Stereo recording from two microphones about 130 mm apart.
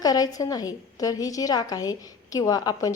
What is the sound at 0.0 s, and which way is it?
A woman's voice, 30° left (ahead or behind).